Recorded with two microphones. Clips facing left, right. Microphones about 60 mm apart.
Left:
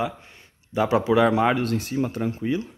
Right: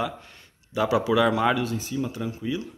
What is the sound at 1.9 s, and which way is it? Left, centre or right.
Speech, left.